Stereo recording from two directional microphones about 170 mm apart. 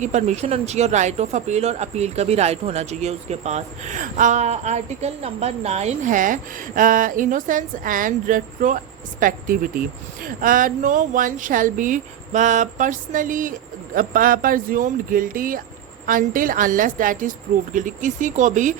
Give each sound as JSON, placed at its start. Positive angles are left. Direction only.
{"t": 0.0, "sound": "speech", "side_deg": -45}